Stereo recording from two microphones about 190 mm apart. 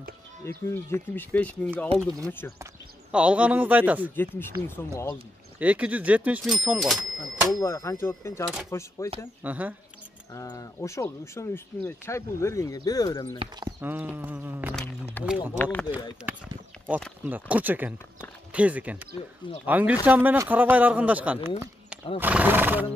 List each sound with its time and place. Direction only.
0.7 s speech: 15° left (ahead or behind)
2.6 s speech: 5° right (ahead or behind)
4.1 s speech: 10° left (ahead or behind)
5.6 s speech: 5° right (ahead or behind)
7.6 s speech: 15° left (ahead or behind)
9.4 s speech: 10° right (ahead or behind)
10.3 s speech: 20° left (ahead or behind)
13.4 s speech: 20° right (ahead or behind)
13.7 s speech: 10° right (ahead or behind)
15.2 s speech: 10° left (ahead or behind)
16.3 s speech: 10° right (ahead or behind)